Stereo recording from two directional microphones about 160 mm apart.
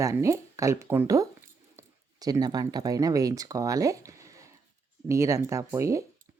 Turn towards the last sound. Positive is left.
turn(degrees=-20)  # may be behind; listen again after turning